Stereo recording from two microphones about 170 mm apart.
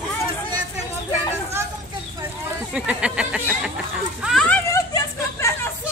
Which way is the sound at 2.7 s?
5° right (ahead or behind).